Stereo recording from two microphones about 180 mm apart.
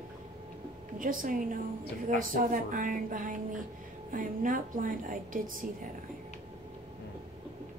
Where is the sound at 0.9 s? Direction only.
50° right (ahead or behind).